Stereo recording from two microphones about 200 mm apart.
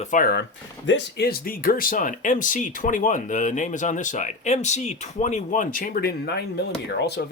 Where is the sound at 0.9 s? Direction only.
60° left (ahead or behind).